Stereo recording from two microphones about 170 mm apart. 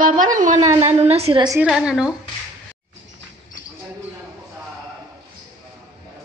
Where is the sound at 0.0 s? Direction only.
50° right (ahead or behind).